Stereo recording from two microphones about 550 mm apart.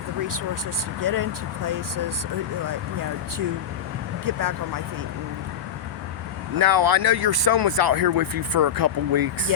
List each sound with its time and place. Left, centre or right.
1.0 s speech: right
4.3 s speech: right
6.6 s speech: right